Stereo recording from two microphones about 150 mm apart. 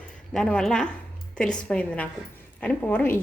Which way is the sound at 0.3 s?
5° left (ahead or behind).